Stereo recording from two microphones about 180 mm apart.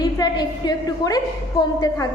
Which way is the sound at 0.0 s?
20° left (ahead or behind).